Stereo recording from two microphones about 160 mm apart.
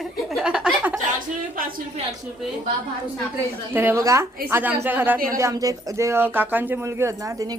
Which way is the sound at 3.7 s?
10° right (ahead or behind).